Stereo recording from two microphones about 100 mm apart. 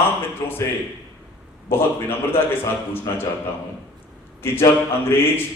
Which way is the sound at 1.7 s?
25° left (ahead or behind).